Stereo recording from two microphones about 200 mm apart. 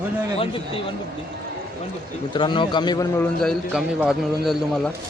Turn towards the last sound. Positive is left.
turn(degrees=0)  # may be behind; listen again after turning